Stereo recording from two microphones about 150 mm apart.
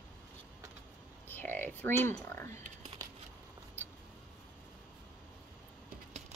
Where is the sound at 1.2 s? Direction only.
10° left (ahead or behind).